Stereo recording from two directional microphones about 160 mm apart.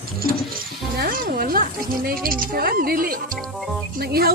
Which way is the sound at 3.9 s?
75° right (ahead or behind).